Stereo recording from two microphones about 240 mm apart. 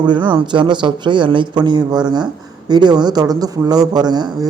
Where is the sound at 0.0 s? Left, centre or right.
Centre.